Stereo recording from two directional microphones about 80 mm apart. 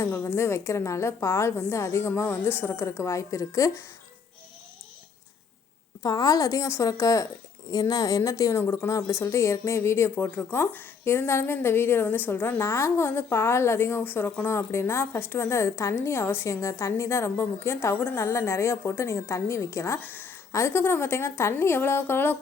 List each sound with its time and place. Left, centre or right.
0.0 s a woman's voice: left
6.0 s a woman's voice: left
20.1 s a woman's voice: left